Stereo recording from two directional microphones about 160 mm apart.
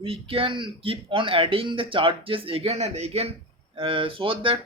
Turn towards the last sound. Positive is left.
turn(degrees=-35)  # may be behind; listen again after turning